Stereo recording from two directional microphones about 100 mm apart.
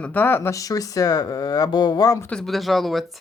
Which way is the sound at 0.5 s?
35° left (ahead or behind).